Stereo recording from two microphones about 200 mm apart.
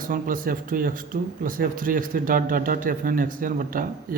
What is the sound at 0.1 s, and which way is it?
Speech, 45° right (ahead or behind).